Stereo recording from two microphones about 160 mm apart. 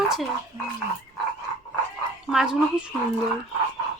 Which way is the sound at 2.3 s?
5° right (ahead or behind).